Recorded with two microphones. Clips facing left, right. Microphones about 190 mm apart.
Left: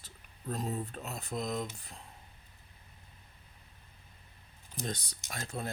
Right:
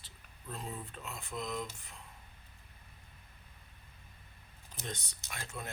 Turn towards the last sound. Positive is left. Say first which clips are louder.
# left 5 dB
turn(degrees=35)  # may be behind; listen again after turning